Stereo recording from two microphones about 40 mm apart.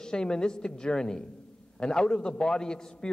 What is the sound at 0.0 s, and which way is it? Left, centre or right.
A man's voice, centre.